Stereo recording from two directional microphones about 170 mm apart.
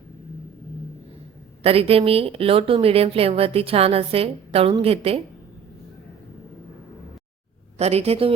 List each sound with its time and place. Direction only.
1.6 s a woman's voice: 35° right (ahead or behind)
7.8 s a woman's voice: 40° right (ahead or behind)